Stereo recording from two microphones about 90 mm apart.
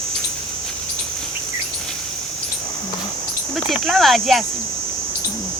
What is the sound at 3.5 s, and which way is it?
Speech, centre (ahead or behind).